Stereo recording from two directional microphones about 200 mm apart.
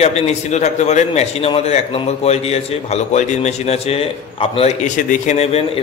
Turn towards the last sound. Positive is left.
turn(degrees=35)  # may be behind; listen again after turning